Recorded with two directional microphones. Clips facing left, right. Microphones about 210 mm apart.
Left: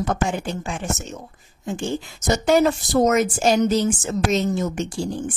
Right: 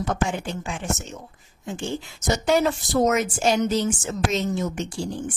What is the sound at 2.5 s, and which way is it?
Speech, 45° left (ahead or behind).